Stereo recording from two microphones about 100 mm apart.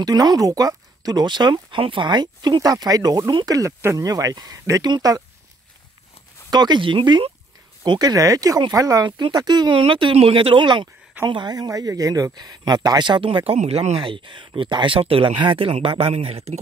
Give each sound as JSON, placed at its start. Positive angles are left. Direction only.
{"t": 0.0, "sound": "speech", "side_deg": -40}
{"t": 6.5, "sound": "speech", "side_deg": -45}
{"t": 9.8, "sound": "speech", "side_deg": -60}
{"t": 14.0, "sound": "speech", "side_deg": -55}